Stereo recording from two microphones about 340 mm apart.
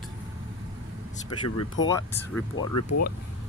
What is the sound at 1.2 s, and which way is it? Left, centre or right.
Speech, left.